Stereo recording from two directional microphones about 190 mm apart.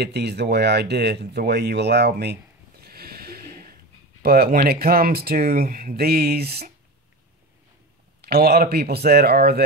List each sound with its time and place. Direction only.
0.0 s speech: 60° right (ahead or behind)
2.8 s a sound: 55° right (ahead or behind)
4.2 s speech: 50° right (ahead or behind)
8.2 s speech: 55° right (ahead or behind)